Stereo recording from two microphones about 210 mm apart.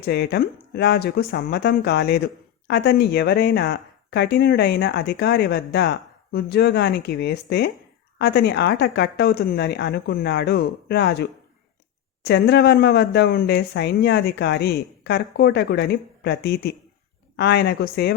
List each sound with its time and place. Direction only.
0.0 s speech: 50° left (ahead or behind)